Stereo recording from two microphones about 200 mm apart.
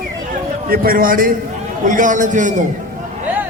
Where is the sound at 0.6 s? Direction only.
45° right (ahead or behind).